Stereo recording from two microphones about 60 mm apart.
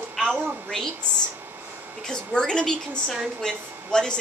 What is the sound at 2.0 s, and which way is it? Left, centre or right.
Speech, centre.